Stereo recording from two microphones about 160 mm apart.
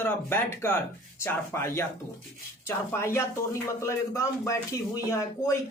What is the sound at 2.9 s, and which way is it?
Speech, 15° left (ahead or behind).